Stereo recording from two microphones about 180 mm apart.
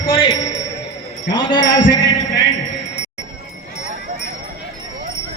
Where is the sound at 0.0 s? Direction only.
30° left (ahead or behind).